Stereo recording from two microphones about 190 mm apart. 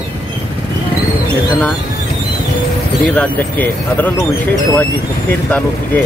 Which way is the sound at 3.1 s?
10° left (ahead or behind).